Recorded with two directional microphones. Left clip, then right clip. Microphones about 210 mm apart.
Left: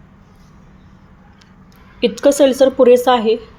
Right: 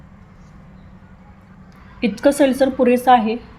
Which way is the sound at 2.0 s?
30° left (ahead or behind).